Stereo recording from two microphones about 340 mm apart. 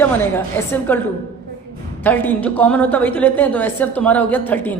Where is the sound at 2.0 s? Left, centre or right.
Centre.